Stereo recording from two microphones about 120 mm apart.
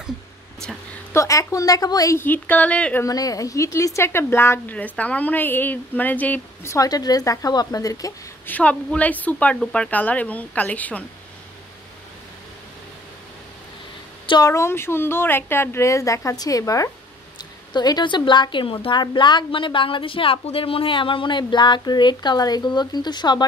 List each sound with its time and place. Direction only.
1.1 s a woman's voice: 25° left (ahead or behind)
2.1 s speech: 15° left (ahead or behind)
3.0 s a woman's voice: 30° left (ahead or behind)
8.5 s speech: 10° left (ahead or behind)
14.2 s a woman's voice: 40° left (ahead or behind)
14.5 s a woman's voice: 20° left (ahead or behind); by 23.4 s 35° left (ahead or behind)